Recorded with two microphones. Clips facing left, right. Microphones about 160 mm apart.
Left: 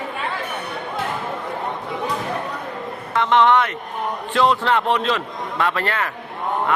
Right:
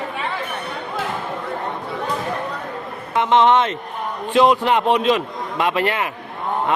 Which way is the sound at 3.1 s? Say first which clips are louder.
Right 1 dB; 20° right (ahead or behind).